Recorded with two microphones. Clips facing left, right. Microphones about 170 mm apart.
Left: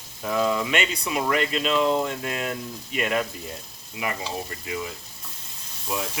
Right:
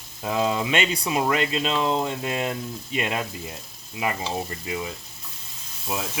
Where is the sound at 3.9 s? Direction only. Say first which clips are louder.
Right 3 dB; 30° right (ahead or behind).